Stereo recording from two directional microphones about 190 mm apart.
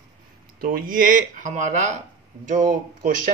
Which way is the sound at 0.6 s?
50° right (ahead or behind).